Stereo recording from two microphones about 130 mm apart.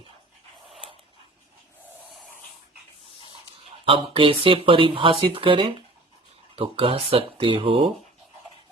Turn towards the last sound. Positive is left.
turn(degrees=-45)  # may be behind; listen again after turning